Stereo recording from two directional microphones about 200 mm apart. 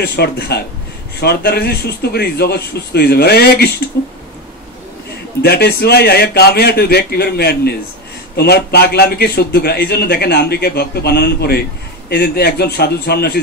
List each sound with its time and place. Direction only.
0.0 s a man's voice: 55° left (ahead or behind)
5.4 s a man's voice: 50° left (ahead or behind)